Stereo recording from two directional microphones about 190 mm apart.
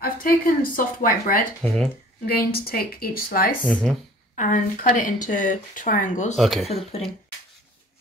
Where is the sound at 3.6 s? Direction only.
5° left (ahead or behind).